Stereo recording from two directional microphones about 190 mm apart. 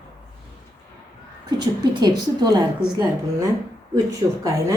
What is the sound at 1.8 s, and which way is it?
A woman's voice, 20° right (ahead or behind).